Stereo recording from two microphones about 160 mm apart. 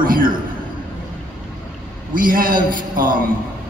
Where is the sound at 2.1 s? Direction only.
60° right (ahead or behind).